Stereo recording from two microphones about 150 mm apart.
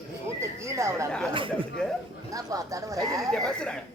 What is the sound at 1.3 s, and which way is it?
Speech, 35° right (ahead or behind).